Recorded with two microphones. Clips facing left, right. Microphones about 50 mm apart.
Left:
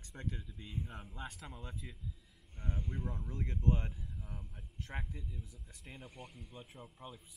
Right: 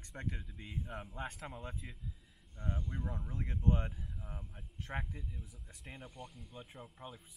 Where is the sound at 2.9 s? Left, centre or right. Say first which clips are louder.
Even; centre.